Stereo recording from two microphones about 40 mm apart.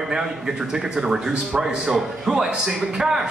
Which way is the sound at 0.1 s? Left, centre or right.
Centre.